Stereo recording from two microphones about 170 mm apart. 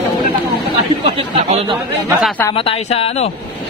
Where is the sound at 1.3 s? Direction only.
40° right (ahead or behind).